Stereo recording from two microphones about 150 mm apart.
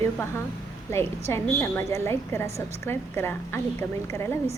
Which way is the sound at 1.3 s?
15° left (ahead or behind).